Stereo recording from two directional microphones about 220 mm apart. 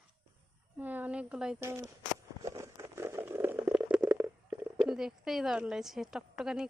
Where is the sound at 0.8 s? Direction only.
10° right (ahead or behind).